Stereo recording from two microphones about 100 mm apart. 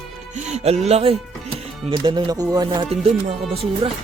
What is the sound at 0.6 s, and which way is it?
Music, 90° right.